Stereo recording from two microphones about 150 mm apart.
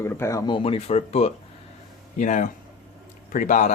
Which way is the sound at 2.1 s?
55° left (ahead or behind).